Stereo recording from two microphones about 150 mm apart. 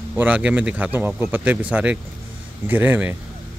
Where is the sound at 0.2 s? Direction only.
10° right (ahead or behind).